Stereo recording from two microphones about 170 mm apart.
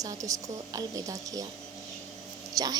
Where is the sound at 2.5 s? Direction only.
20° right (ahead or behind).